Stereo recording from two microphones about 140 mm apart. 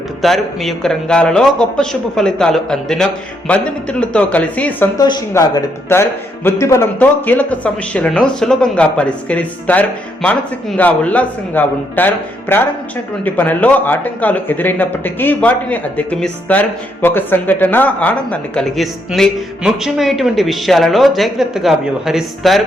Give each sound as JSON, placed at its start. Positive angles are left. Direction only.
{"t": 0.2, "sound": "a man's voice", "side_deg": 0}
{"t": 4.9, "sound": "speech", "side_deg": 30}
{"t": 5.3, "sound": "a man's voice", "side_deg": 20}